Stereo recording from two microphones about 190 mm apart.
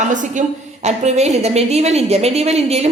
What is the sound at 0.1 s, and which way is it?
A woman's voice, 40° right (ahead or behind).